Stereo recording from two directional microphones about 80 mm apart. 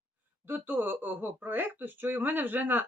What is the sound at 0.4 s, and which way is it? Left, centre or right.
Speech, right.